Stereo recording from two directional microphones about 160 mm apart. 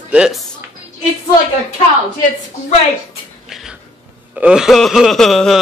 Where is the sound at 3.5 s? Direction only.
Centre (ahead or behind).